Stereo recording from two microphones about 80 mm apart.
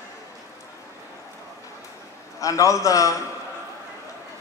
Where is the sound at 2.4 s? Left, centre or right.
Left.